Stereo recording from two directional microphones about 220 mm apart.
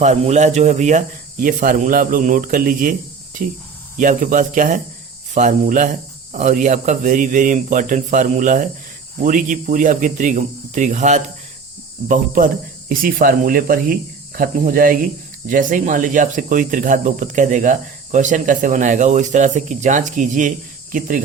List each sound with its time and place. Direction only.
0.0 s speech: 30° right (ahead or behind)
3.9 s speech: 35° right (ahead or behind)